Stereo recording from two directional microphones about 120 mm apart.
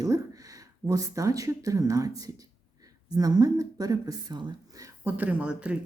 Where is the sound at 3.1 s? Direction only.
30° right (ahead or behind).